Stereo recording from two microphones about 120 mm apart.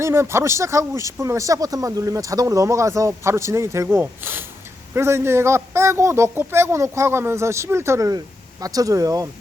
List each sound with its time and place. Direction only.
0.0 s speech: 20° right (ahead or behind)